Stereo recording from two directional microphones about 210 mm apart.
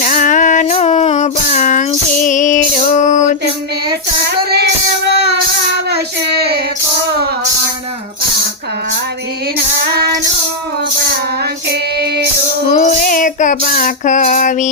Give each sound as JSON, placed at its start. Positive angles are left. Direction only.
{"t": 0.0, "sound": "female singing", "side_deg": 40}
{"t": 5.0, "sound": "child singing", "side_deg": -55}
{"t": 11.7, "sound": "music", "side_deg": -50}
{"t": 12.7, "sound": "child singing", "side_deg": 35}